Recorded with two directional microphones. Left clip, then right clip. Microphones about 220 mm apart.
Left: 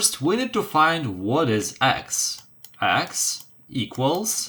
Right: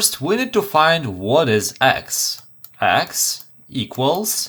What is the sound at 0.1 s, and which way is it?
Speech, 55° right (ahead or behind).